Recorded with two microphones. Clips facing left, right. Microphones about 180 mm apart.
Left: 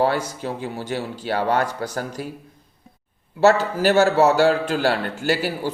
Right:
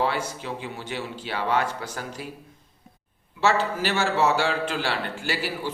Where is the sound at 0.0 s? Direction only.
40° left (ahead or behind).